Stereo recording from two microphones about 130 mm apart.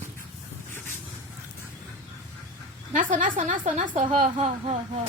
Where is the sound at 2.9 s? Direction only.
90° right.